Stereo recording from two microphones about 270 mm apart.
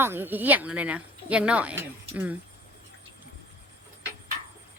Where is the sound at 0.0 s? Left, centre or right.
Centre.